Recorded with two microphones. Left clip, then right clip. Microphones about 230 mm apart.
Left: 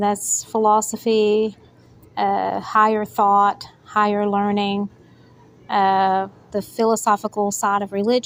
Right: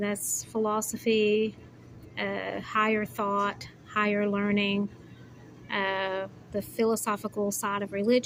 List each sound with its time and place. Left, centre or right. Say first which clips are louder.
0.0 s a woman's voice: left 11 dB; left